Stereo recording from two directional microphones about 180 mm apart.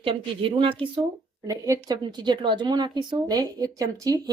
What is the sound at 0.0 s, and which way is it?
Speech, 30° right (ahead or behind).